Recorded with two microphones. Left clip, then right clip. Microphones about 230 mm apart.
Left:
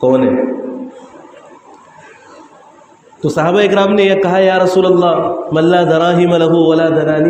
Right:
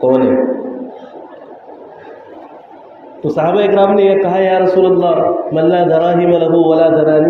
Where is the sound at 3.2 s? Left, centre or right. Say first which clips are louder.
Left 1 dB; left.